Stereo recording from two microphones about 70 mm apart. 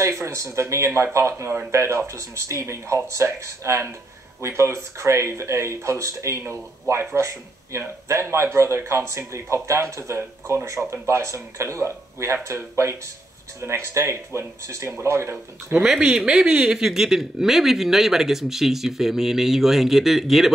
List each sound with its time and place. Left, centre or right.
0.0 s speech: right
15.8 s speech: centre